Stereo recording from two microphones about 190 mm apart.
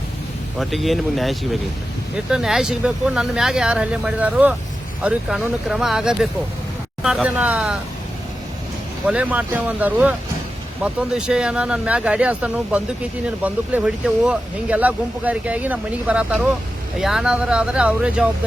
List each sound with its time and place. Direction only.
0.6 s speech: centre (ahead or behind)
9.0 s speech: 5° right (ahead or behind)